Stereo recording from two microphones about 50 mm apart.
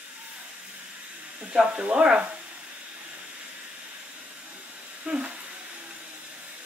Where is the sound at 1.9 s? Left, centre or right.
Centre.